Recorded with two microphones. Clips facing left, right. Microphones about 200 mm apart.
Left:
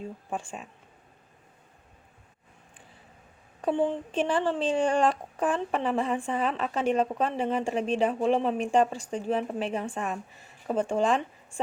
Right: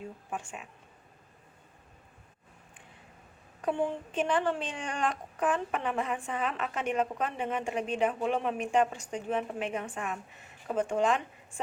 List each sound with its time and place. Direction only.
0.3 s speech: 30° left (ahead or behind)
3.7 s speech: 30° left (ahead or behind)